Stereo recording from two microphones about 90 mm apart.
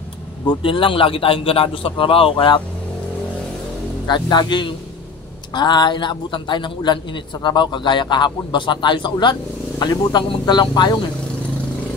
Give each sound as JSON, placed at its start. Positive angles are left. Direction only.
{"t": 0.5, "sound": "a man's voice", "side_deg": 70}
{"t": 2.3, "sound": "a man's voice", "side_deg": 60}
{"t": 4.1, "sound": "a man's voice", "side_deg": 55}